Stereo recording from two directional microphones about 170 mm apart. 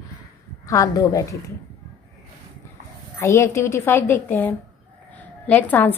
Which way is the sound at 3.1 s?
15° left (ahead or behind).